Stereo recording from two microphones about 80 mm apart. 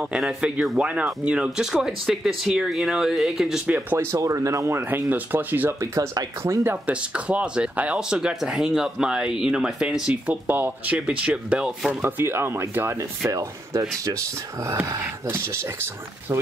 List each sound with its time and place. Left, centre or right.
0.0 s speech: centre
1.7 s speech: centre
3.6 s speech: right
4.0 s speech: right
4.8 s speech: right
6.9 s speech: centre
12.0 s speech: right
13.3 s speech: right